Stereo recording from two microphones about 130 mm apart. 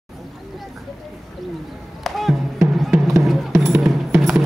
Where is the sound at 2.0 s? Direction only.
Centre (ahead or behind).